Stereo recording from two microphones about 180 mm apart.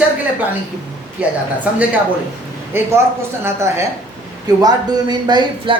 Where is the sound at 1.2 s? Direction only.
10° right (ahead or behind).